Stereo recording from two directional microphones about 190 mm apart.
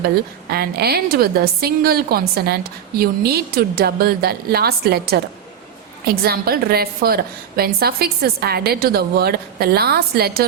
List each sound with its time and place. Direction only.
0.5 s a woman's voice: 55° right (ahead or behind)